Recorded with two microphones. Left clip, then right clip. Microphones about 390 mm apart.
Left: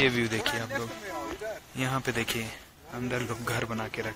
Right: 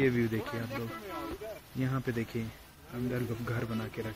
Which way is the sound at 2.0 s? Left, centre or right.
Left.